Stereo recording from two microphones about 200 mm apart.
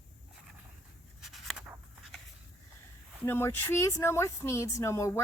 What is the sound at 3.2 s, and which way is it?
Speech, 10° left (ahead or behind).